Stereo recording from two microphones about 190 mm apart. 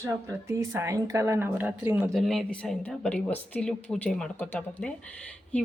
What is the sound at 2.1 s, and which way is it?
Speech, centre (ahead or behind).